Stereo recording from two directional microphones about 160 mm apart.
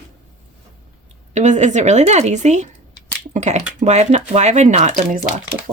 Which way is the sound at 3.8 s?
45° right (ahead or behind).